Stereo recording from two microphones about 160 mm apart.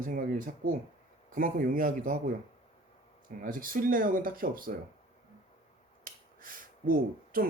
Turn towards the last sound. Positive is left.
turn(degrees=-60)  # may be behind; listen again after turning